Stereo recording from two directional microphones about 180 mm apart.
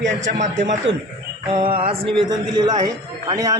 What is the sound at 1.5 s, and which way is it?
A man's voice, 30° right (ahead or behind).